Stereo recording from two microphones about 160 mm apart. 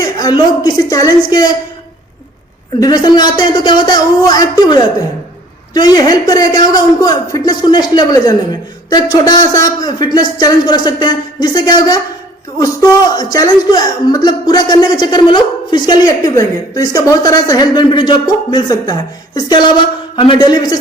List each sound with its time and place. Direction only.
0.0 s speech: 25° left (ahead or behind)
2.8 s speech: 25° left (ahead or behind)